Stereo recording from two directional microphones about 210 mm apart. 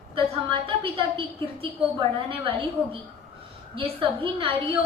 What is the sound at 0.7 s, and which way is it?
A woman's voice, 25° right (ahead or behind).